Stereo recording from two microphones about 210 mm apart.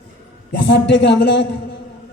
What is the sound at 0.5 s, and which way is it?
A man's voice, 55° left (ahead or behind).